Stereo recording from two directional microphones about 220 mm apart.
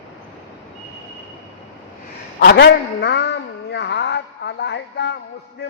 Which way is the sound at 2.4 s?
45° left (ahead or behind).